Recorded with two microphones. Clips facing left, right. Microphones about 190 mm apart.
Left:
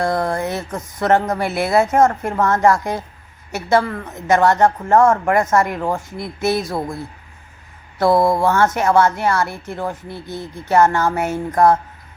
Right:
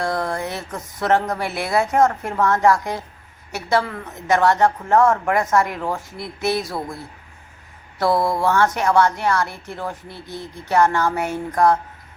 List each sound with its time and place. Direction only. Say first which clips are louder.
0.0 s speech: left 4 dB; centre (ahead or behind)
8.0 s mantra: left 4 dB; 25° left (ahead or behind)
8.4 s speech: left 2 dB; centre (ahead or behind)